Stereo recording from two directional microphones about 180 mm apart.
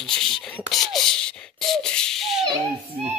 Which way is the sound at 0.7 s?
Centre (ahead or behind).